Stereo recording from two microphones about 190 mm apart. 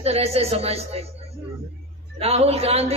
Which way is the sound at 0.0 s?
35° right (ahead or behind).